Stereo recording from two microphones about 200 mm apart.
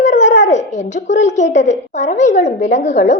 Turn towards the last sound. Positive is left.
turn(degrees=35)  # may be behind; listen again after turning